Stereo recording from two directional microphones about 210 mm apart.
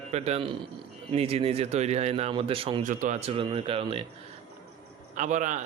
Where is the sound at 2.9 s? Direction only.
35° right (ahead or behind).